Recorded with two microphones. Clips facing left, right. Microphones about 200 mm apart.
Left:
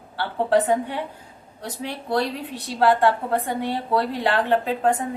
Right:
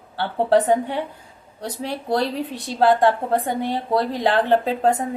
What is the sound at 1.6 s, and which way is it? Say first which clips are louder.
Speech: right 3 dB; 40° right (ahead or behind).